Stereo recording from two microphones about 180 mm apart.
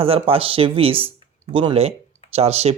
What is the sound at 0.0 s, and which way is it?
Speech, 30° right (ahead or behind).